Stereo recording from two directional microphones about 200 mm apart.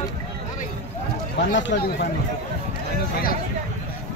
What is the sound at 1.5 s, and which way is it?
Speech, 65° left (ahead or behind).